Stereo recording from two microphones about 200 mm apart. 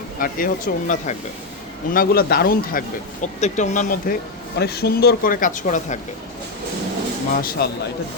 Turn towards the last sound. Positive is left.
turn(degrees=50)  # may be behind; listen again after turning